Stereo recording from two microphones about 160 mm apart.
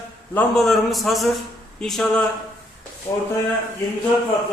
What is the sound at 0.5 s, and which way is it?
A man's voice, centre (ahead or behind).